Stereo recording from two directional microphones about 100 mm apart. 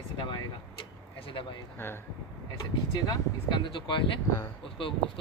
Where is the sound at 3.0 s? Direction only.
40° left (ahead or behind).